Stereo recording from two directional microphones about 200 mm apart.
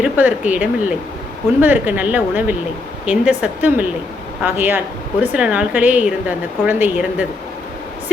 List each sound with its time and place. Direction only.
0.0 s a woman's voice: 10° right (ahead or behind)